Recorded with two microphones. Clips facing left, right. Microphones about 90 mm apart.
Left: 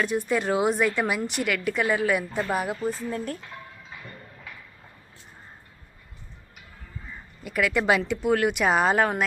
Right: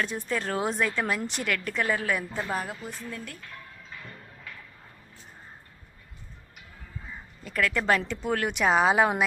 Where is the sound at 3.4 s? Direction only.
20° left (ahead or behind).